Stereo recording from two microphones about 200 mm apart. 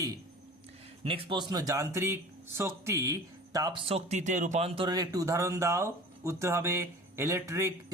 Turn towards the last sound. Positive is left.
turn(degrees=-15)  # may be behind; listen again after turning